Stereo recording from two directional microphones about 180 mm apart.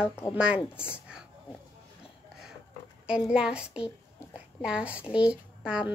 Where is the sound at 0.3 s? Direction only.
5° right (ahead or behind).